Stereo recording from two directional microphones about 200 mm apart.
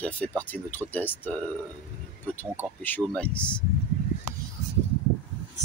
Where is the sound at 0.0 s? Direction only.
5° left (ahead or behind).